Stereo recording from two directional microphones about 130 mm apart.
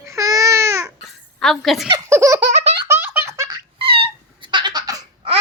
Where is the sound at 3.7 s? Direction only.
45° right (ahead or behind).